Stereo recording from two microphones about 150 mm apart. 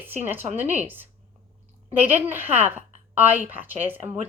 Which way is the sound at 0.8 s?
10° right (ahead or behind).